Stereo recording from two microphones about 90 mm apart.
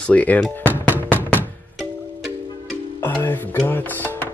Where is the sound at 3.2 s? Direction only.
20° left (ahead or behind).